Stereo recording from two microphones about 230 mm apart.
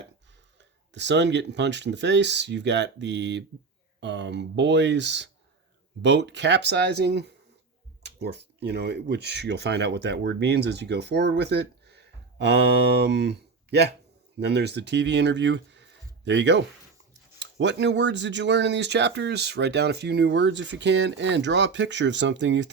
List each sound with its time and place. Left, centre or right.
0.6 s speech: right